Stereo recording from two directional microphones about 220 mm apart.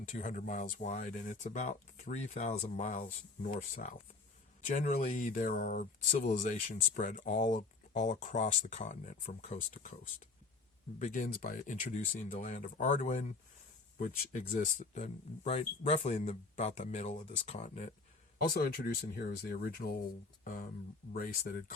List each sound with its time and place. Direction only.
0.1 s speech: 35° left (ahead or behind)
11.0 s speech: 35° left (ahead or behind)